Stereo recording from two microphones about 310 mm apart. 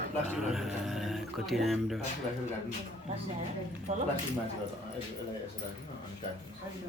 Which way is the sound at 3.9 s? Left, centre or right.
Right.